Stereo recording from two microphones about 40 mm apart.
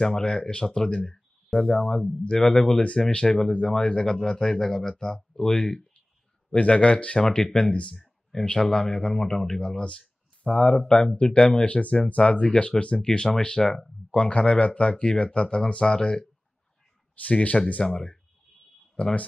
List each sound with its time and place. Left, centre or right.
0.0 s speech: centre
6.5 s speech: left
11.6 s speech: left; by 13.8 s centre
14.1 s speech: left
17.2 s speech: left
17.8 s speech: centre
19.0 s speech: left